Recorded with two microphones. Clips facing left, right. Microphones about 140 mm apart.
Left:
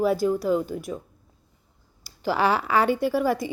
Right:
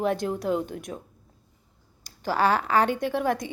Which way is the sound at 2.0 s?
10° left (ahead or behind).